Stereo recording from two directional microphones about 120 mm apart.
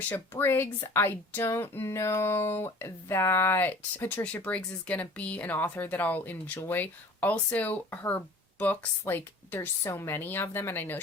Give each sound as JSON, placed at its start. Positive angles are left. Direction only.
{"t": 0.1, "sound": "speech", "side_deg": 15}